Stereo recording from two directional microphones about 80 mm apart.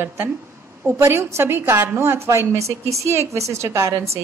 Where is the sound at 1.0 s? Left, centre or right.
Right.